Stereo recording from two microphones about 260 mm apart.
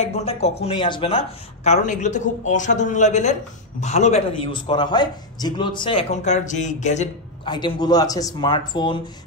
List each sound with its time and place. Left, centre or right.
0.0 s a man's voice: left